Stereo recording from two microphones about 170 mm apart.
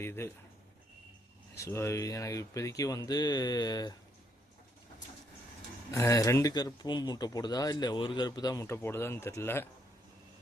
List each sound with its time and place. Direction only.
0.0 s speech: 15° left (ahead or behind)
1.5 s speech: 15° left (ahead or behind)
5.9 s speech: 20° left (ahead or behind)